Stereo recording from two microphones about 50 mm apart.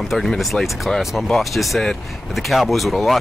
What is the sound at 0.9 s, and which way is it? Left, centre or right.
Speech, centre.